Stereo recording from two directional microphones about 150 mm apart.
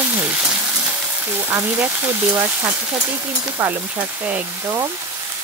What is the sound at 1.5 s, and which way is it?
Speech, 15° right (ahead or behind).